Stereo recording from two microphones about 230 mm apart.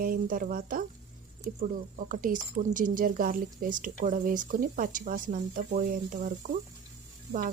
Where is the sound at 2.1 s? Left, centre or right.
Right.